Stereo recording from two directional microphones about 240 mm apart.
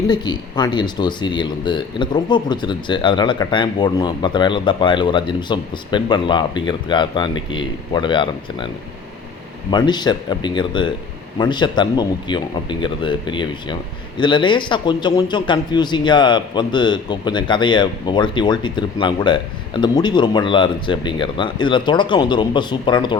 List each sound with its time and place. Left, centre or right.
0.1 s speech: centre